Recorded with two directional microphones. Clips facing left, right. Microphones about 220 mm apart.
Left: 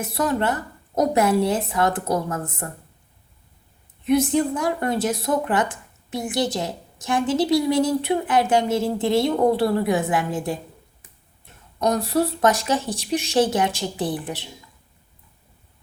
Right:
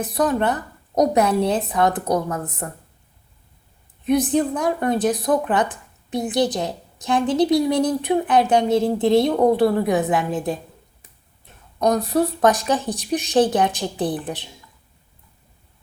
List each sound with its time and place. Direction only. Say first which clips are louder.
0.3 s a woman's voice: right 2 dB; 20° right (ahead or behind)
4.0 s a woman's voice: right 1 dB; 15° right (ahead or behind)
11.9 s a woman's voice: right 2 dB; 15° right (ahead or behind)